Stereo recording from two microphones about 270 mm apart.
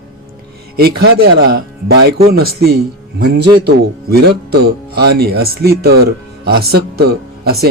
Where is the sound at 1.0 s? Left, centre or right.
Right.